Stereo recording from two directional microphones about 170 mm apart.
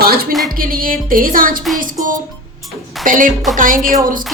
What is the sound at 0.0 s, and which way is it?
Music, 65° right (ahead or behind).